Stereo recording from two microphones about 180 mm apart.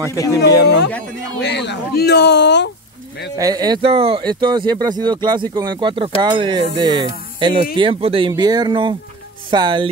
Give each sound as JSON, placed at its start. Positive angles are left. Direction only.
{"t": 0.1, "sound": "speech", "side_deg": 15}
{"t": 1.4, "sound": "speech", "side_deg": 70}
{"t": 3.3, "sound": "speech", "side_deg": -20}